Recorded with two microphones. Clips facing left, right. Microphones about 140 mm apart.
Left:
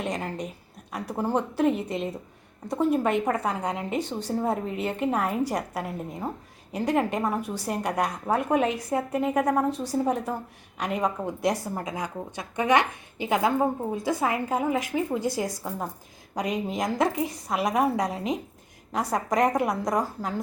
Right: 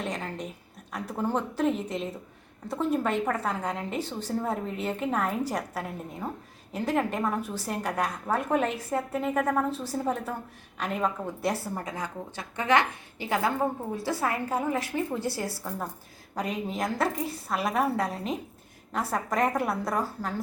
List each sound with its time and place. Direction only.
0.0 s a woman's voice: 10° left (ahead or behind)